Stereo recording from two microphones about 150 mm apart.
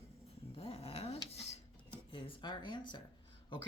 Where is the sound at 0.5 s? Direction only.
40° left (ahead or behind).